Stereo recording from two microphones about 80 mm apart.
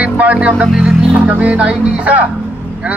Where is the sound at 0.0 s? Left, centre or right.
Centre.